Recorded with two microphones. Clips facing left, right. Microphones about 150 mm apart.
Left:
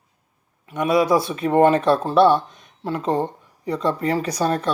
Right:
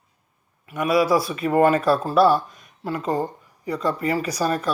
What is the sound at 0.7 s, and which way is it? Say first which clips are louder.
Speech: left 1 dB; 5° right (ahead or behind).